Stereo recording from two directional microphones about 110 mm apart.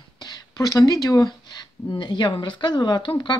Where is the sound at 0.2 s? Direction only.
35° left (ahead or behind).